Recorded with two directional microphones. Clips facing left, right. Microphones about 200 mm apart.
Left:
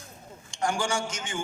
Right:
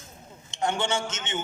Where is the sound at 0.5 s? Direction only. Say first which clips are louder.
Right 1 dB; 25° right (ahead or behind).